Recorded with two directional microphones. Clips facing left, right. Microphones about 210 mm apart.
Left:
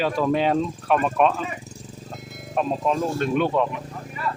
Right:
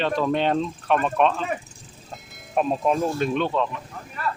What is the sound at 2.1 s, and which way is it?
Music, centre (ahead or behind).